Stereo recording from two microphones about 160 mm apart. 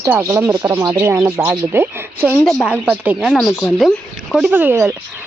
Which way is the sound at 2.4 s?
10° left (ahead or behind).